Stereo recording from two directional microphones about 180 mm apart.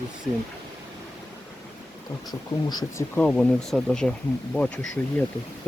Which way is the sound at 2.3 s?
20° left (ahead or behind).